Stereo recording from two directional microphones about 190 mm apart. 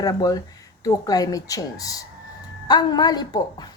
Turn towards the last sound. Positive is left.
turn(degrees=20)  # may be behind; listen again after turning